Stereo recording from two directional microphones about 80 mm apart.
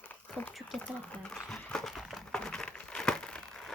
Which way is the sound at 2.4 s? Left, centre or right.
Centre.